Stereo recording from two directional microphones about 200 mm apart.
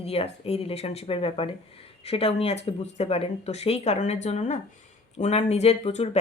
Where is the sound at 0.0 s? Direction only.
30° left (ahead or behind).